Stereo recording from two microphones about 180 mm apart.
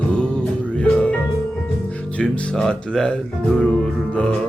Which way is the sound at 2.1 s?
5° left (ahead or behind).